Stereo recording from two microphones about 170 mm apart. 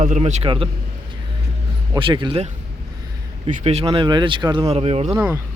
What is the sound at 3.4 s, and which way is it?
Speech, 35° right (ahead or behind).